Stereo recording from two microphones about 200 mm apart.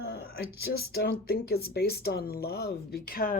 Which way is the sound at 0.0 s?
55° left (ahead or behind).